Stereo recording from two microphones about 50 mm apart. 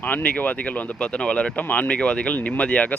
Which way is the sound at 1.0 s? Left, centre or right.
Left.